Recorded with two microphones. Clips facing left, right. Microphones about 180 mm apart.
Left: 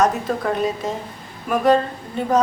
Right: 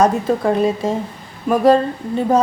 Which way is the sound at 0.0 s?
30° right (ahead or behind).